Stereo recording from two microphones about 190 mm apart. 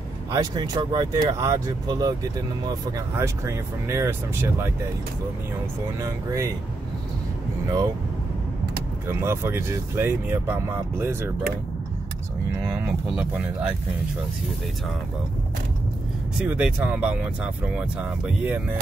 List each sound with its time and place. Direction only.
0.3 s speech: 15° right (ahead or behind)
5.9 s speech: 15° right (ahead or behind)
9.2 s speech: 15° right (ahead or behind)
13.1 s speech: 5° right (ahead or behind)
16.3 s speech: 5° right (ahead or behind)